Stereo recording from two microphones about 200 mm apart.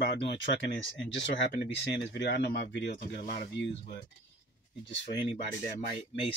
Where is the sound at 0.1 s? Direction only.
60° left (ahead or behind).